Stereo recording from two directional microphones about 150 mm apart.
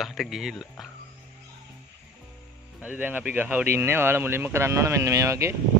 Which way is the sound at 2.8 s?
10° right (ahead or behind).